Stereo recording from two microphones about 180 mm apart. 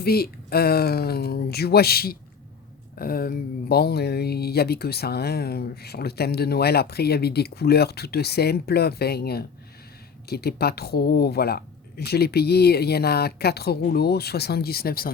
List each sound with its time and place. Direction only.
0.0 s speech: 60° left (ahead or behind)